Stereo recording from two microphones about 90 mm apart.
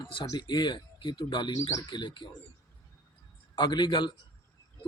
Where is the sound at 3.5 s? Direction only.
60° left (ahead or behind).